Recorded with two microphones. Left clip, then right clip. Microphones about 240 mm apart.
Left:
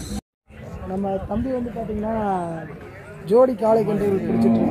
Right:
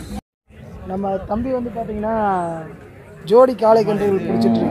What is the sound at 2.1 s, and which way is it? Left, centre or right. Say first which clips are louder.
Speech: right 5 dB; right.